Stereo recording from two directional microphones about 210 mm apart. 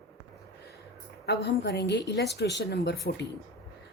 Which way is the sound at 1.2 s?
50° left (ahead or behind).